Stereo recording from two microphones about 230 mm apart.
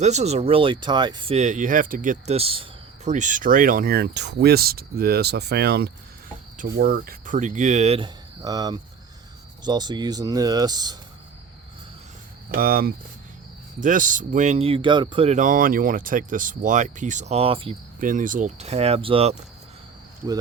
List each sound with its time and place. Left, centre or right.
0.0 s speech: right
12.5 s speech: right
18.0 s speech: right